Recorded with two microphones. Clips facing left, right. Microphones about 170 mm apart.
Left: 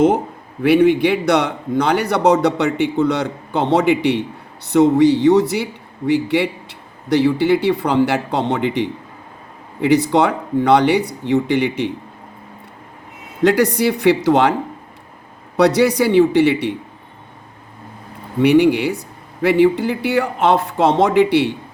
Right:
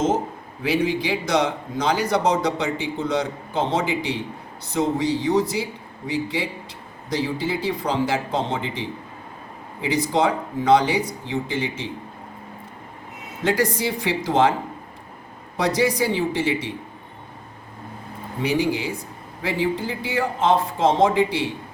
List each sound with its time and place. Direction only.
0.6 s a man's voice: 60° left (ahead or behind)
13.4 s a man's voice: 65° left (ahead or behind)
15.5 s a man's voice: 70° left (ahead or behind)
18.3 s a man's voice: 65° left (ahead or behind)